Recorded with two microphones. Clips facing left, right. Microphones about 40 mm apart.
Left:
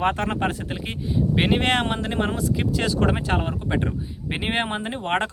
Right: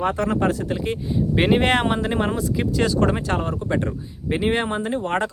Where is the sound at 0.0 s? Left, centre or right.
Left.